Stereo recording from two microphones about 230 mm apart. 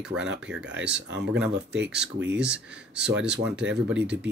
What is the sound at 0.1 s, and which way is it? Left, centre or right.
Speech, right.